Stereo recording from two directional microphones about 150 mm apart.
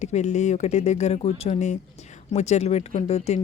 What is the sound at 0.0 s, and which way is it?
Speech, 50° left (ahead or behind).